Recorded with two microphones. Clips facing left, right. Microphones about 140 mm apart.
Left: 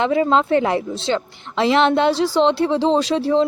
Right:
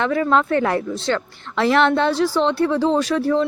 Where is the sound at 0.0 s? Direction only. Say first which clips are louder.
Left 2 dB; 20° left (ahead or behind).